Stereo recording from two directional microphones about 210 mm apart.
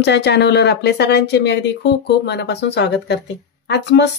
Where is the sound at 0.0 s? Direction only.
55° left (ahead or behind).